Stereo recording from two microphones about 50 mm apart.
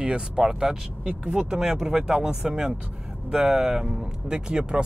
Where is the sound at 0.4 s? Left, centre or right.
Centre.